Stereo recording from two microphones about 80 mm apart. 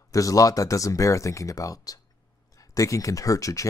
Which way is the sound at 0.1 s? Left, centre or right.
Left.